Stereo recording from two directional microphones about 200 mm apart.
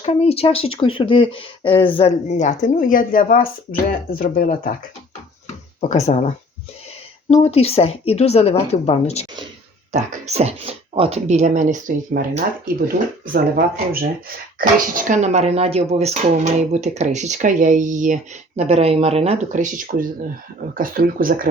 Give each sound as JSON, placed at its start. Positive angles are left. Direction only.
{"t": 0.0, "sound": "speech", "side_deg": 30}
{"t": 5.9, "sound": "speech", "side_deg": 35}
{"t": 7.4, "sound": "speech", "side_deg": 30}
{"t": 9.9, "sound": "speech", "side_deg": -35}
{"t": 14.9, "sound": "speech", "side_deg": -40}